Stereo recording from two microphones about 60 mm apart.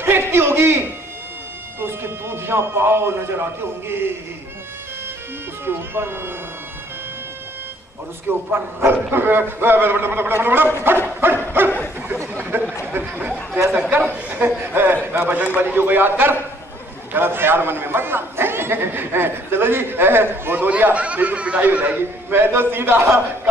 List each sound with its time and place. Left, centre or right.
0.0 s a sound: right
5.7 s speech: right
8.5 s speech: right